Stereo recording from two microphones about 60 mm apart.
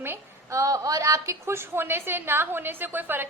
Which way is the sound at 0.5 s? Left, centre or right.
Right.